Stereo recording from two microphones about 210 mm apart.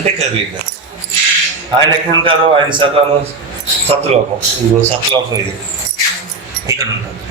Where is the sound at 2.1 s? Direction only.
25° right (ahead or behind).